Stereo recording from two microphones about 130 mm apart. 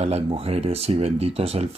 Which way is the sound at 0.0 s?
50° right (ahead or behind).